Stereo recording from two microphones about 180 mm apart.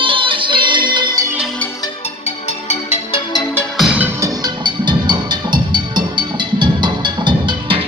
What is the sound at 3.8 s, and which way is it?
Music, 5° right (ahead or behind).